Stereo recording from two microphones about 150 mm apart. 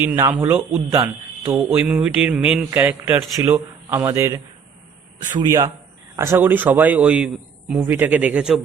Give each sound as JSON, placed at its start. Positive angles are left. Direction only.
{"t": 0.0, "sound": "a man's voice", "side_deg": -15}
{"t": 0.9, "sound": "a man's voice", "side_deg": -25}
{"t": 1.5, "sound": "a man's voice", "side_deg": -10}
{"t": 5.4, "sound": "a man's voice", "side_deg": -25}